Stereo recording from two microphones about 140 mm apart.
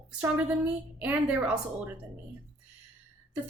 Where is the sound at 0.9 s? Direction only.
10° right (ahead or behind).